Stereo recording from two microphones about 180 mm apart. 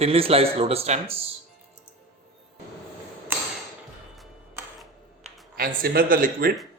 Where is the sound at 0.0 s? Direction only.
35° right (ahead or behind).